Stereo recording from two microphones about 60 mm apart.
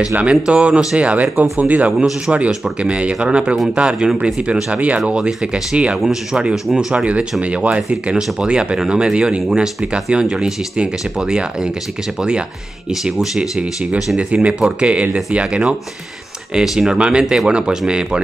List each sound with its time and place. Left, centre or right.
0.1 s speech: centre
1.9 s speech: centre
2.3 s speech: centre
6.9 s speech: centre
9.9 s speech: centre
13.4 s speech: centre
16.5 s speech: centre